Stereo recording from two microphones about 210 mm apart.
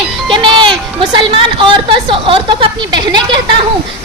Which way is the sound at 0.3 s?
25° right (ahead or behind).